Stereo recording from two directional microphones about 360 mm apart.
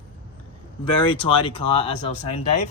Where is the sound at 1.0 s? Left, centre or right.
Centre.